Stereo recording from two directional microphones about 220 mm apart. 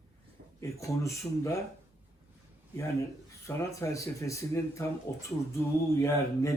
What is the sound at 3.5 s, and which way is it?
Speech, 15° left (ahead or behind).